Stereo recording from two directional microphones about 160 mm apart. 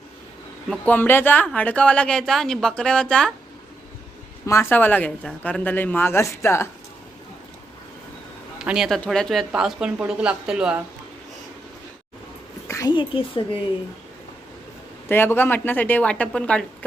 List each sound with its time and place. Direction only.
0.7 s speech: 10° left (ahead or behind)
4.4 s speech: 15° left (ahead or behind)
8.5 s speech: 5° right (ahead or behind)
12.6 s a sound: 20° left (ahead or behind)
12.9 s speech: 30° left (ahead or behind)
15.0 s speech: 15° left (ahead or behind)